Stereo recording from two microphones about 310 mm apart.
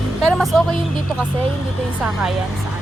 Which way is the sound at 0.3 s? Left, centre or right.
Centre.